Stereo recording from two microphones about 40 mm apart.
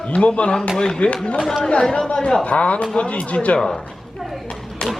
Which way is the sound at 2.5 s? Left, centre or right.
Left.